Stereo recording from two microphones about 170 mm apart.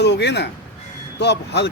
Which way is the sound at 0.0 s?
85° left.